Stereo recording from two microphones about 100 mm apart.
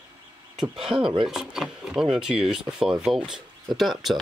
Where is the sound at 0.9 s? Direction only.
5° right (ahead or behind).